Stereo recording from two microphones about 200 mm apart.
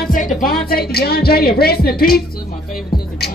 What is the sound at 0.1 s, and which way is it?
Speech, 40° left (ahead or behind).